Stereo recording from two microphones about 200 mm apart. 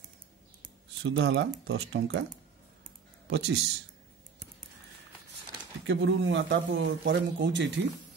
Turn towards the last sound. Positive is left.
turn(degrees=-65)  # may be behind; listen again after turning